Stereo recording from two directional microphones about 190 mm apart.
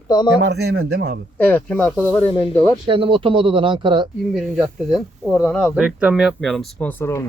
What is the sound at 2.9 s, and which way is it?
Speech, 25° right (ahead or behind).